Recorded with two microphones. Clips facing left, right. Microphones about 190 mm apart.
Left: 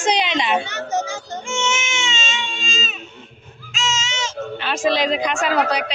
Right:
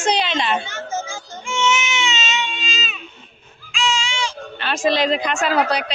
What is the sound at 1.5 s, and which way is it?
Baby cry, 45° left (ahead or behind).